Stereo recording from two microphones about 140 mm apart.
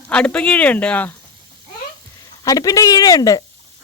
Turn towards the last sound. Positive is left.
turn(degrees=25)  # may be behind; listen again after turning